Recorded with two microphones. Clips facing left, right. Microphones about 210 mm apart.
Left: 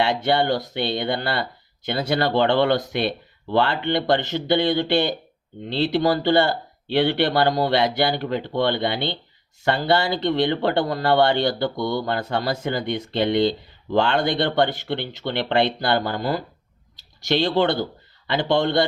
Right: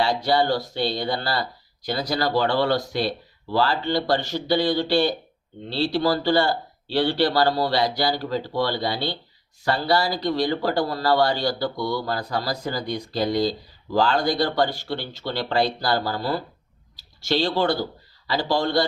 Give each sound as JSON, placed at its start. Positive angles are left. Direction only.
{"t": 0.0, "sound": "speech", "side_deg": 25}
{"t": 17.0, "sound": "speech", "side_deg": 20}